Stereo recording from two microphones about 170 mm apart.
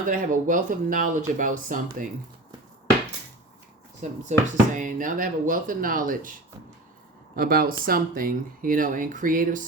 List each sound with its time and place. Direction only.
0.1 s speech: 50° right (ahead or behind)
4.2 s speech: 45° right (ahead or behind)
7.3 s speech: 60° right (ahead or behind)